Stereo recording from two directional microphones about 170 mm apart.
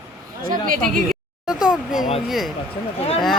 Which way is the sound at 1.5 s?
5° right (ahead or behind).